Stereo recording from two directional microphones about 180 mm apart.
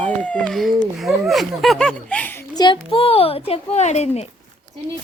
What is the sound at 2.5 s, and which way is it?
A child's voice, 25° left (ahead or behind).